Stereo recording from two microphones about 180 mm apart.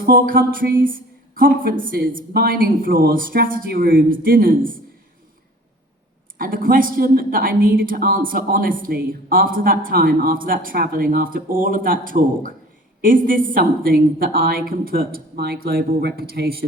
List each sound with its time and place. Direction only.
0.0 s a woman's voice: 55° right (ahead or behind)
6.4 s a woman's voice: 50° right (ahead or behind)